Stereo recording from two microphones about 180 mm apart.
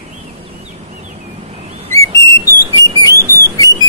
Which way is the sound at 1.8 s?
30° right (ahead or behind).